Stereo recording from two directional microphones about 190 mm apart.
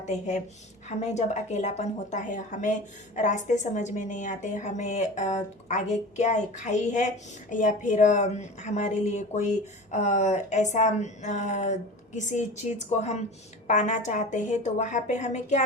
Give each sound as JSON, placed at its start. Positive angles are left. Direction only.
{"t": 0.0, "sound": "a woman's voice", "side_deg": 40}